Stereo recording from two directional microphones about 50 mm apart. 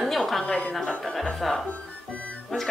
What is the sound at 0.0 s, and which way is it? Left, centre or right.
Music, centre.